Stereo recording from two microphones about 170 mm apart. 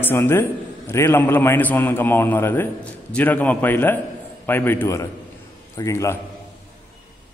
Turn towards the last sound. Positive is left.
turn(degrees=15)  # may be behind; listen again after turning